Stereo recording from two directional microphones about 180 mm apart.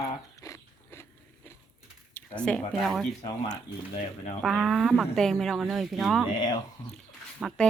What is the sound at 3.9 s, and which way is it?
Speech, 35° left (ahead or behind).